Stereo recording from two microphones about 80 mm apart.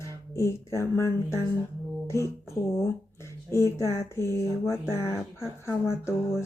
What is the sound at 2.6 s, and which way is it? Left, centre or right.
Speech, left.